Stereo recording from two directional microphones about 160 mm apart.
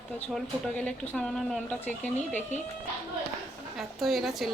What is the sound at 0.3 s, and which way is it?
Speech, 5° left (ahead or behind).